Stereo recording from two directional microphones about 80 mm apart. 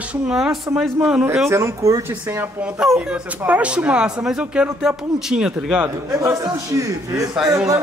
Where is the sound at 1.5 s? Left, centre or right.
Right.